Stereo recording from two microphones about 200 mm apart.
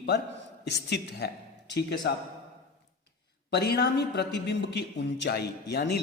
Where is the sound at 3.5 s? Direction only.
55° left (ahead or behind).